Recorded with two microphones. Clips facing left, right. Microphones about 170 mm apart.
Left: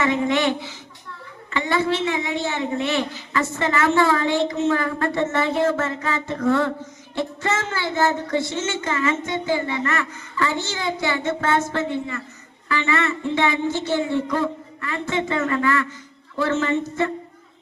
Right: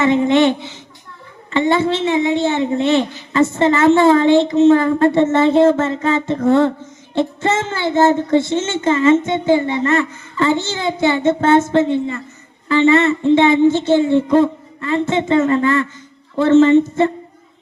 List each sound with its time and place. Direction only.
0.0 s a woman's voice: 25° right (ahead or behind)